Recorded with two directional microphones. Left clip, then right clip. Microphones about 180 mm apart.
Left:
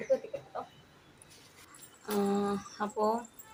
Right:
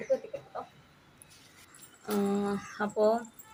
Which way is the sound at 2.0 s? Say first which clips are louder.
Even; centre (ahead or behind).